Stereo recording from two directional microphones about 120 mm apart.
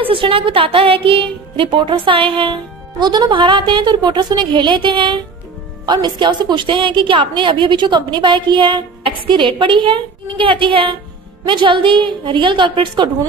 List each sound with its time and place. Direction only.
0.0 s a woman's voice: 50° right (ahead or behind)